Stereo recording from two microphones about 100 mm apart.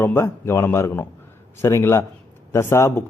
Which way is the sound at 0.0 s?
25° left (ahead or behind).